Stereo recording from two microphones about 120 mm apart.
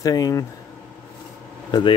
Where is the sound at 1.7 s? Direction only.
45° left (ahead or behind).